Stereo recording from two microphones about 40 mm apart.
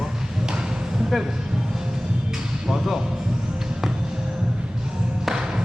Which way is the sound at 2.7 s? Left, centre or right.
Centre.